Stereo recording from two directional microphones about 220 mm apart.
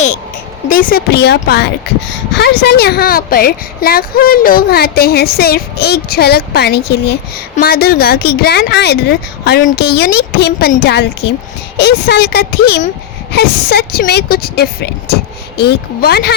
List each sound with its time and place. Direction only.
0.7 s speech: 40° left (ahead or behind)